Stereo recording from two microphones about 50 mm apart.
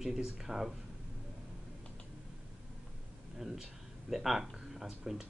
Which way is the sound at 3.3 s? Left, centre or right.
Centre.